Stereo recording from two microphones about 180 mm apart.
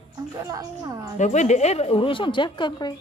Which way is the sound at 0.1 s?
20° right (ahead or behind).